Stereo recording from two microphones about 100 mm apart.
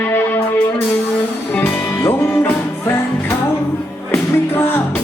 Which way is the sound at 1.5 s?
15° left (ahead or behind).